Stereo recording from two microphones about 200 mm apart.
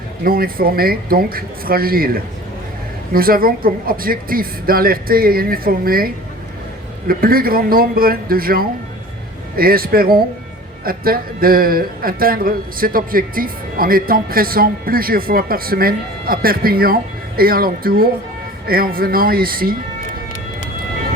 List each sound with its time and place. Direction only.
0.3 s a man's voice: 45° right (ahead or behind)
7.1 s a man's voice: 45° right (ahead or behind)